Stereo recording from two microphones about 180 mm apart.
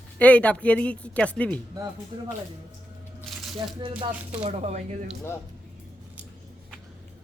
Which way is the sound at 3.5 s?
30° right (ahead or behind).